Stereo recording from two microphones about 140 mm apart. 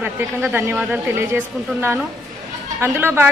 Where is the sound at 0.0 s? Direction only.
10° right (ahead or behind).